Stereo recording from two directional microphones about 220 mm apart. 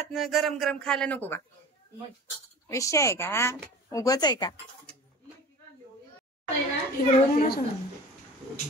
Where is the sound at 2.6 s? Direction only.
15° left (ahead or behind).